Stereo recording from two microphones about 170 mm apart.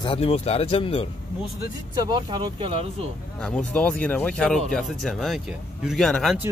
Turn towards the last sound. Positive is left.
turn(degrees=5)  # may be behind; listen again after turning